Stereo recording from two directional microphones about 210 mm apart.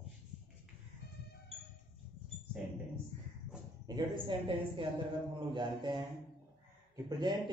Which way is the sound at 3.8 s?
20° right (ahead or behind).